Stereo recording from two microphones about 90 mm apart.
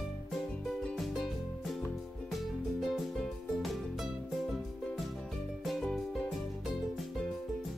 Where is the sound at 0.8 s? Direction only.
Centre (ahead or behind).